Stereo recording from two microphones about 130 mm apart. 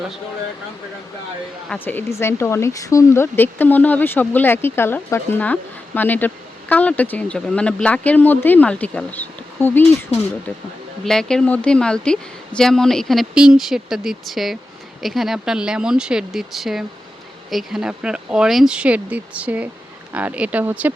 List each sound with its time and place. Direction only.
1.8 s speech: 15° left (ahead or behind)
11.0 s speech: 5° left (ahead or behind); by 20.9 s 15° right (ahead or behind)